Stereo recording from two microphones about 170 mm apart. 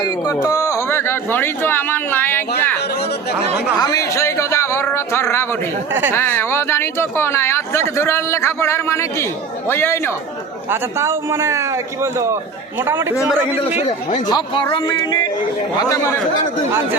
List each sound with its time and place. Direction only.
0.0 s speech: 20° left (ahead or behind)
3.8 s speech: 20° left (ahead or behind)
5.9 s a man's voice: 10° right (ahead or behind)
6.1 s speech: 15° left (ahead or behind)
10.7 s a man's voice: 15° right (ahead or behind)
13.7 s speech: 40° left (ahead or behind)
14.3 s speech: 25° left (ahead or behind)